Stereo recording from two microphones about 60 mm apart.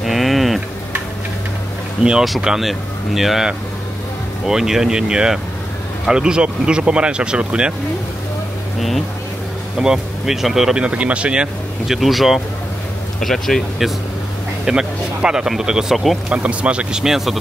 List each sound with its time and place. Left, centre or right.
0.0 s music: centre
2.4 s speech: centre
8.7 s speech: centre
10.8 s speech: right
11.9 s speech: centre
14.6 s speech: centre
16.3 s speech: centre
17.0 s speech: centre